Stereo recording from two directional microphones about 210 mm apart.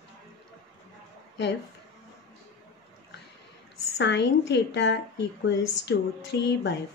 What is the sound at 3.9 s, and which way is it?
A woman's voice, 55° left (ahead or behind).